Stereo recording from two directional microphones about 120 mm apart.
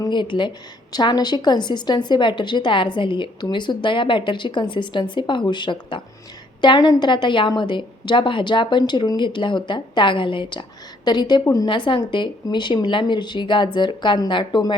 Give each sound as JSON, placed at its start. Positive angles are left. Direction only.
{"t": 0.0, "sound": "a woman's voice", "side_deg": 40}
{"t": 11.9, "sound": "a woman's voice", "side_deg": 40}